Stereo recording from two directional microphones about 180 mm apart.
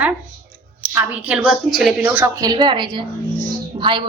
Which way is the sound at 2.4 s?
25° right (ahead or behind).